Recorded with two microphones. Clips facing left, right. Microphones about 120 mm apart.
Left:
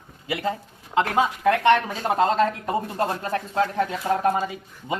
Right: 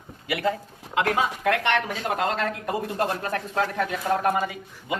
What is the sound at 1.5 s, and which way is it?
Speech, 30° left (ahead or behind).